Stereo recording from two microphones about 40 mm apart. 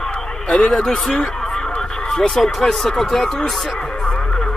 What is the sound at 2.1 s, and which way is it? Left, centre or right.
Speech, centre.